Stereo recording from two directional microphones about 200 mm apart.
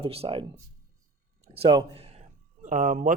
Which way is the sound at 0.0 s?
30° right (ahead or behind).